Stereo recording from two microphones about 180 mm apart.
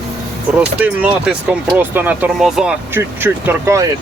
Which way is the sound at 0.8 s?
5° right (ahead or behind).